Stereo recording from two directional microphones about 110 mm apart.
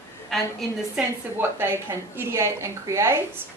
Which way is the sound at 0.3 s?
Centre (ahead or behind).